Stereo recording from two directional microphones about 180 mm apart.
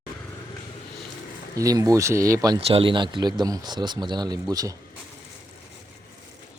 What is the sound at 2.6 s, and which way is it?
Speech, 30° right (ahead or behind).